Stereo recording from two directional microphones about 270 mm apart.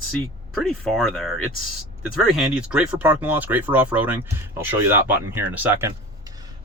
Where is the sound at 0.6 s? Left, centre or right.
Centre.